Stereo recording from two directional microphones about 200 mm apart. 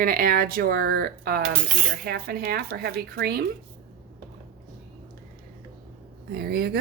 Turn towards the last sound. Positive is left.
turn(degrees=-50)  # may be behind; listen again after turning